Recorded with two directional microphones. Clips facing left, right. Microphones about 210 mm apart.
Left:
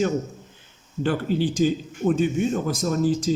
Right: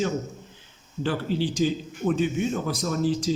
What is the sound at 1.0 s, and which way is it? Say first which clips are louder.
A man's voice: left 3 dB; 50° left (ahead or behind).